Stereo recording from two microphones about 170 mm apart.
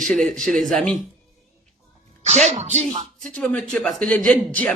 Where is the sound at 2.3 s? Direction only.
40° right (ahead or behind).